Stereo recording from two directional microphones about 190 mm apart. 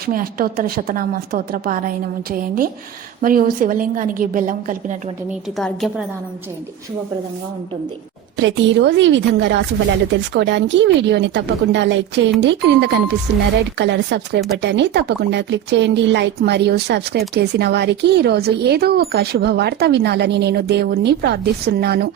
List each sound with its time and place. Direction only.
0.0 s a woman's voice: 50° right (ahead or behind)
3.2 s a woman's voice: 45° right (ahead or behind)
5.5 s a woman's voice: centre (ahead or behind)
8.4 s speech: 70° right (ahead or behind); by 22.1 s 55° right (ahead or behind)